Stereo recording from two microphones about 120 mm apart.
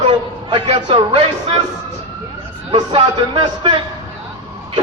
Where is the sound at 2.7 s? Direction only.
50° right (ahead or behind).